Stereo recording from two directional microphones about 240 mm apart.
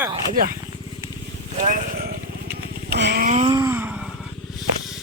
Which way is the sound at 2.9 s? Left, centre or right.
Right.